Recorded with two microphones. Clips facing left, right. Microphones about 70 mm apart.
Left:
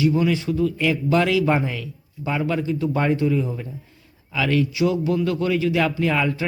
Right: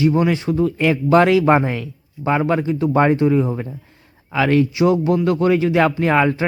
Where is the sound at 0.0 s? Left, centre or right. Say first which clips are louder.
Right 3 dB; right.